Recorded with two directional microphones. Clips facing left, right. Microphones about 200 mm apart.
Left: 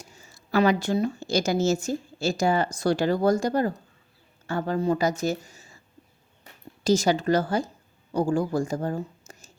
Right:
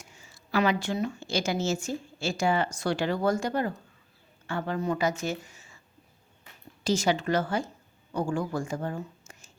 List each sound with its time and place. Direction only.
0.0 s a woman's voice: 40° left (ahead or behind)